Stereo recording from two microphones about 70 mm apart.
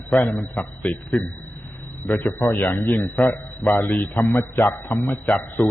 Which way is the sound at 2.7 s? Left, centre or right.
Left.